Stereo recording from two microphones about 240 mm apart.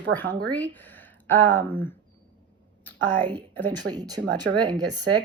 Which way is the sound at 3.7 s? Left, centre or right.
Centre.